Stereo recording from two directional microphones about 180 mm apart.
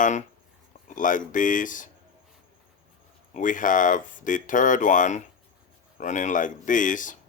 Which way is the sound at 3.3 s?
45° left (ahead or behind).